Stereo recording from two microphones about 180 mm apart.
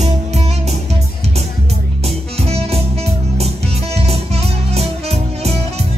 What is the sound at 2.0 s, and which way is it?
Music, 35° right (ahead or behind).